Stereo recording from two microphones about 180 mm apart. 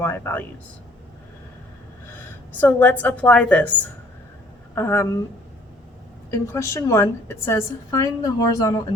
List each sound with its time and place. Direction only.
0.0 s a woman's voice: 10° left (ahead or behind)
2.6 s a woman's voice: 10° left (ahead or behind)
6.3 s a woman's voice: 15° left (ahead or behind)